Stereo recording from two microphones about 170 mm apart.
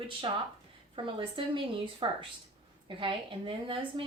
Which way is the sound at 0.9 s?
30° right (ahead or behind).